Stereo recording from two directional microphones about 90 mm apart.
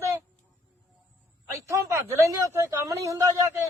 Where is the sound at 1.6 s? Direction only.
30° right (ahead or behind).